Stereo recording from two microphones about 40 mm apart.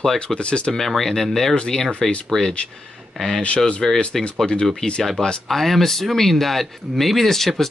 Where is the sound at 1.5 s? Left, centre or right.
Left.